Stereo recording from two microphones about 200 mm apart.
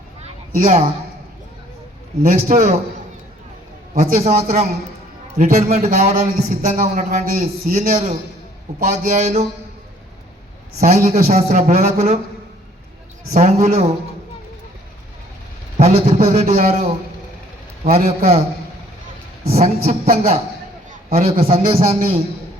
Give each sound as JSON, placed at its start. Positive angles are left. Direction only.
{"t": 0.6, "sound": "a man's voice", "side_deg": -35}
{"t": 2.2, "sound": "a man's voice", "side_deg": -35}
{"t": 4.0, "sound": "a man's voice", "side_deg": -30}
{"t": 10.8, "sound": "a man's voice", "side_deg": -35}
{"t": 13.3, "sound": "a man's voice", "side_deg": -35}
{"t": 16.0, "sound": "a man's voice", "side_deg": -30}
{"t": 19.5, "sound": "a man's voice", "side_deg": -30}